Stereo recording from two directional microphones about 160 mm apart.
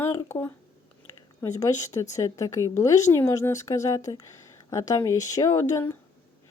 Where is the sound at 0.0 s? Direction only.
15° left (ahead or behind).